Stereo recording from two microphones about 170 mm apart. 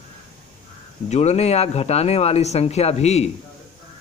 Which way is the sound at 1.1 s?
40° left (ahead or behind).